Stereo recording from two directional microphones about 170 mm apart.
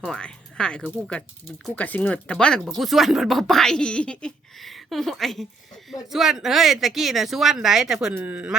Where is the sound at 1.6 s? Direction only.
10° left (ahead or behind).